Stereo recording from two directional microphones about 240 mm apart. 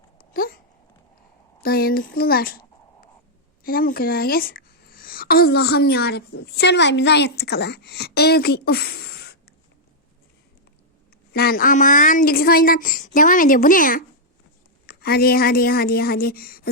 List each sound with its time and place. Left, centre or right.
0.2 s a sound: left
1.6 s a woman's voice: left
11.3 s a woman's voice: left